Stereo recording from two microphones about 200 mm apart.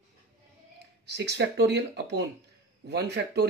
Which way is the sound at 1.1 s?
60° right (ahead or behind).